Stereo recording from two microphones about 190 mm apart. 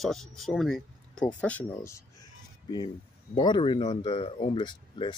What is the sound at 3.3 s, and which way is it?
Speech, 25° left (ahead or behind).